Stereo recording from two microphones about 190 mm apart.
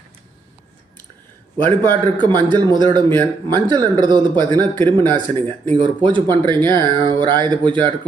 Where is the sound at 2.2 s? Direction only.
25° right (ahead or behind).